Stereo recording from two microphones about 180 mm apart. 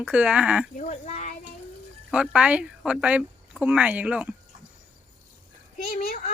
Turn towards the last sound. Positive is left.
turn(degrees=40)  # may be behind; listen again after turning